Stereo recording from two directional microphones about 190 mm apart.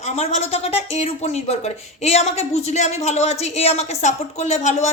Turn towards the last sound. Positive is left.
turn(degrees=35)  # may be behind; listen again after turning